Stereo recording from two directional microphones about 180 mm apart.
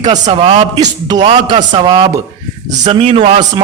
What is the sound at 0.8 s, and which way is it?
A man's voice, 20° right (ahead or behind).